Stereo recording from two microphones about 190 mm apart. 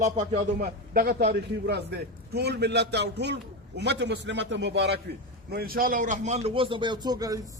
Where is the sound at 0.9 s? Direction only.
55° right (ahead or behind).